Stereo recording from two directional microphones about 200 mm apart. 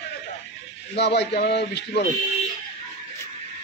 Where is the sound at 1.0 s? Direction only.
55° left (ahead or behind).